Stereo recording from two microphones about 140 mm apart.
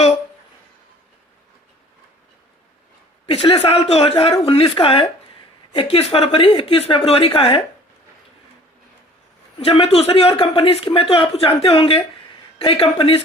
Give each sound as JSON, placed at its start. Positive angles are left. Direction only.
{"t": 3.2, "sound": "speech", "side_deg": 40}
{"t": 9.6, "sound": "speech", "side_deg": 45}